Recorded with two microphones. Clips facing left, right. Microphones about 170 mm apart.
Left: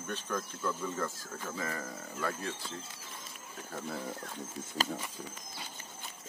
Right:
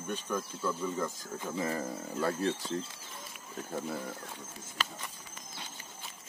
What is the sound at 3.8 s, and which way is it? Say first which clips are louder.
Speech: right 1 dB; centre (ahead or behind).